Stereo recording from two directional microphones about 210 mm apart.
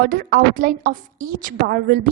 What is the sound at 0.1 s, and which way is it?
A woman's voice, 45° right (ahead or behind).